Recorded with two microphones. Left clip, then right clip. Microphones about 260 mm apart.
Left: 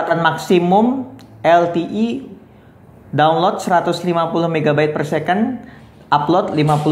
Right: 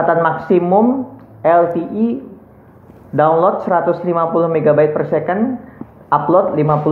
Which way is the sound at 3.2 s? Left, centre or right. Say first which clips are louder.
Right 2 dB; left.